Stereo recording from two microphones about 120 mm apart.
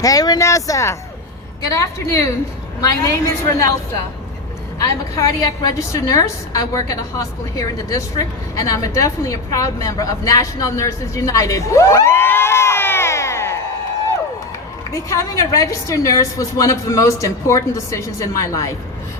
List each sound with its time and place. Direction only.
0.0 s a woman's voice: 30° left (ahead or behind)
4.8 s a woman's voice: 25° left (ahead or behind)
14.9 s a woman's voice: 25° left (ahead or behind)